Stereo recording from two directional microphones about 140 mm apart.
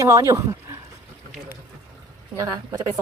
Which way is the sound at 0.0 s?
25° right (ahead or behind).